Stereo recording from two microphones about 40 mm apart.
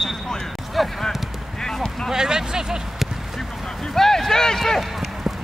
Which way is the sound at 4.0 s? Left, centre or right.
Centre.